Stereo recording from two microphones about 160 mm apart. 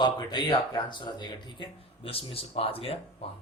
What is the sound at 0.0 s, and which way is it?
Speech, 25° left (ahead or behind).